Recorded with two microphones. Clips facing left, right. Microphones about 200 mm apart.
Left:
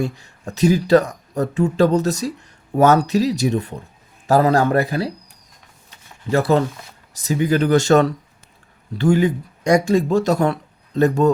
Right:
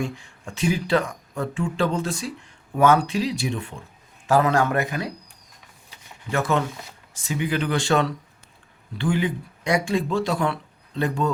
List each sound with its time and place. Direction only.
0.0 s speech: 40° left (ahead or behind)
6.3 s speech: 35° left (ahead or behind)